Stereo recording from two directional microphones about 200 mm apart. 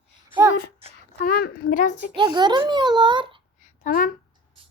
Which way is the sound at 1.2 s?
50° left (ahead or behind).